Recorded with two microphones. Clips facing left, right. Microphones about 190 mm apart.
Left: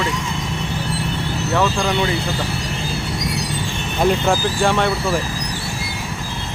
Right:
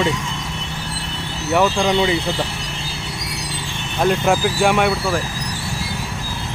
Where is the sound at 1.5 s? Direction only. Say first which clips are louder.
Right 3 dB; 15° right (ahead or behind).